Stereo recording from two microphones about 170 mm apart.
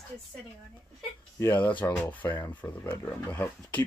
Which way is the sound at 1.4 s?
10° left (ahead or behind).